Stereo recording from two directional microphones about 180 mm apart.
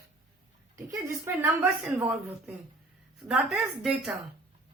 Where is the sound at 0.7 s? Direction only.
15° right (ahead or behind).